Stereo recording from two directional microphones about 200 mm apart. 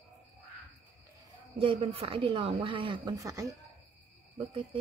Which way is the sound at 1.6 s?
30° right (ahead or behind).